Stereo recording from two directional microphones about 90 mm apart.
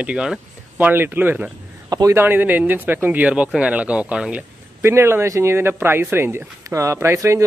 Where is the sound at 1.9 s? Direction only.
45° right (ahead or behind).